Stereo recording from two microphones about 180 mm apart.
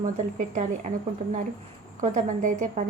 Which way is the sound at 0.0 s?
45° right (ahead or behind).